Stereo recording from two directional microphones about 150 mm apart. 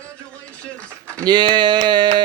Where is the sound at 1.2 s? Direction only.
30° right (ahead or behind).